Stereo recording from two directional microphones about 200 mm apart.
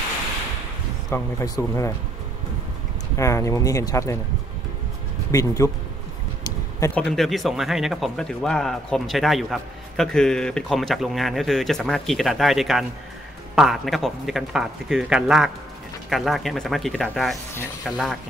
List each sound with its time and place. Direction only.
1.1 s speech: 15° left (ahead or behind)
3.2 s speech: 15° left (ahead or behind)
5.3 s speech: 15° left (ahead or behind)
7.0 s speech: centre (ahead or behind)